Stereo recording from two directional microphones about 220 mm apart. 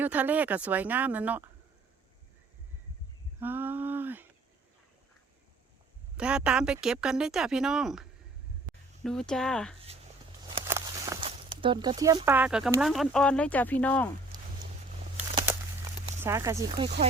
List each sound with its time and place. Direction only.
0.0 s speech: 5° right (ahead or behind)
3.4 s a sound: 10° right (ahead or behind)
6.1 s speech: 5° right (ahead or behind)
9.0 s speech: 5° left (ahead or behind)
10.7 s walk: 15° right (ahead or behind)
11.3 s speech: 20° right (ahead or behind); by 14.1 s 5° left (ahead or behind)
14.3 s a sound: 20° right (ahead or behind)
16.2 s speech: 10° right (ahead or behind)